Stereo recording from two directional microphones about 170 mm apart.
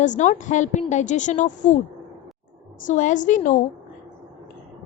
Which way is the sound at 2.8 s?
45° left (ahead or behind).